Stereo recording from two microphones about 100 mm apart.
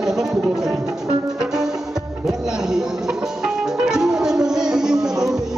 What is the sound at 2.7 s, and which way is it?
Music, 5° right (ahead or behind).